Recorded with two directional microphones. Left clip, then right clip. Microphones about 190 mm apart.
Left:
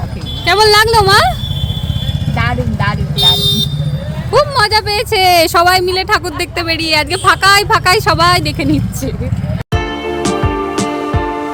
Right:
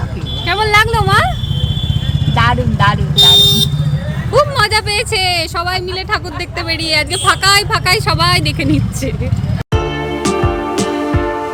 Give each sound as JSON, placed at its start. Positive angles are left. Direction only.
{"t": 0.4, "sound": "a woman's voice", "side_deg": 35}
{"t": 2.3, "sound": "speech", "side_deg": 0}
{"t": 4.3, "sound": "a sound", "side_deg": 20}
{"t": 5.2, "sound": "speech", "side_deg": 40}